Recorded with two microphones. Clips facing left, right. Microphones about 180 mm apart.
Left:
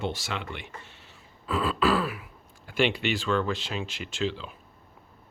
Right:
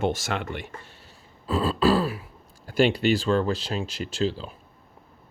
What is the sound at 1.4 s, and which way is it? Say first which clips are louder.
Speech: right 4 dB; 30° right (ahead or behind).